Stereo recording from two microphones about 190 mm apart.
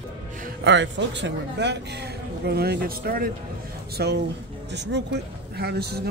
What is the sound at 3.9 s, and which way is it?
Speech, 60° right (ahead or behind).